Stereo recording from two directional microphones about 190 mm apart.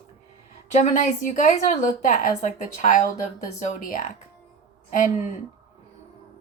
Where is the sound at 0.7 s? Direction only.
40° left (ahead or behind).